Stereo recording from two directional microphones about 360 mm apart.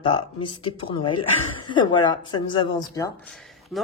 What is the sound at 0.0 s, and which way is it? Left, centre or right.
Speech, centre.